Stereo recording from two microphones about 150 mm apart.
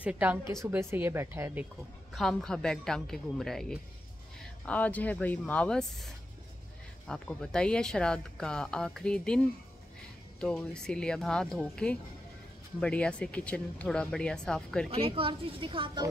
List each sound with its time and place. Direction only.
0.0 s speech: 10° right (ahead or behind)
2.1 s speech: 5° left (ahead or behind)
10.4 s speech: 5° left (ahead or behind)
14.9 s a woman's voice: 40° right (ahead or behind)